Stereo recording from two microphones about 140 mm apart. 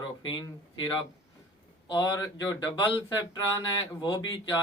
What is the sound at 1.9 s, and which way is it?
Speech, 30° left (ahead or behind).